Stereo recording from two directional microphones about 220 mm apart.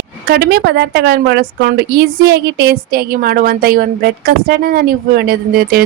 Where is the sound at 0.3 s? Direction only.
45° right (ahead or behind).